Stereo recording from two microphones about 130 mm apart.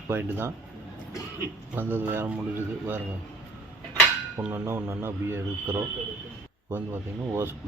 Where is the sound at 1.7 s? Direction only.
15° right (ahead or behind).